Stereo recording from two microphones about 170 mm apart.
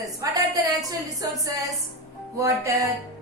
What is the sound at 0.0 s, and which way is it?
A woman's voice, 20° right (ahead or behind).